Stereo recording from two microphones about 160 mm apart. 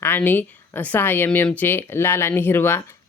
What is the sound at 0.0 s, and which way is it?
Speech, 15° left (ahead or behind).